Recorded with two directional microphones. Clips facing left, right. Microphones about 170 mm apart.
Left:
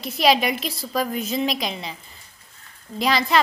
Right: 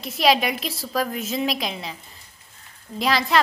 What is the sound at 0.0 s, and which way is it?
A woman's voice, centre (ahead or behind).